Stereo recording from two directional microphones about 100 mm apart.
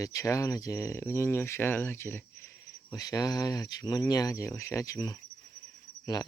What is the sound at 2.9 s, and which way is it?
Speech, 35° left (ahead or behind).